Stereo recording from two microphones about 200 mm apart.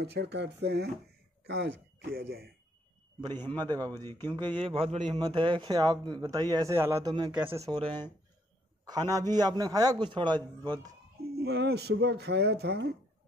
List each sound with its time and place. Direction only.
0.0 s speech: 55° right (ahead or behind)
3.5 s a man's voice: 20° right (ahead or behind)
4.0 s speech: 10° left (ahead or behind)
4.6 s a man's voice: 30° right (ahead or behind)
11.3 s speech: 55° right (ahead or behind)